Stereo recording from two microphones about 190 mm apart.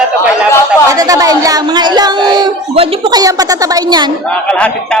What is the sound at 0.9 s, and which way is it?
A woman's voice, 20° right (ahead or behind).